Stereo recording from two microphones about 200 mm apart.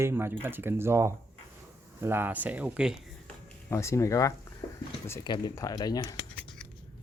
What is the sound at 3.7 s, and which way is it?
Speech, 15° left (ahead or behind).